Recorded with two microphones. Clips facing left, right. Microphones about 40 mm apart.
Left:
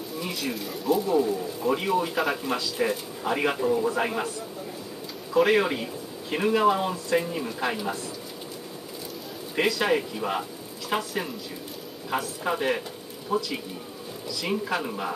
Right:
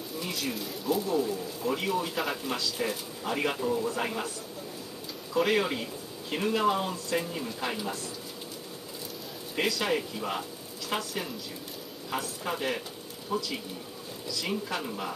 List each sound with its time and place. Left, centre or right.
0.2 s a sound: centre
1.0 s speech: centre
5.3 s speech: centre
9.6 s speech: centre